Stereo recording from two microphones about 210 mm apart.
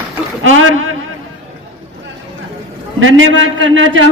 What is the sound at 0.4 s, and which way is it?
Speech, 75° right (ahead or behind).